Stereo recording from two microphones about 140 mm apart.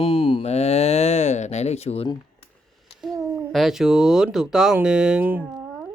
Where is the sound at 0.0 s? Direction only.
40° left (ahead or behind).